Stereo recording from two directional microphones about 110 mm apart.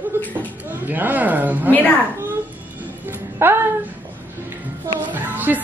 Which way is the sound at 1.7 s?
15° left (ahead or behind).